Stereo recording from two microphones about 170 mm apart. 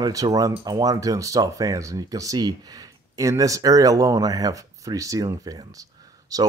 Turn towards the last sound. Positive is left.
turn(degrees=-20)  # may be behind; listen again after turning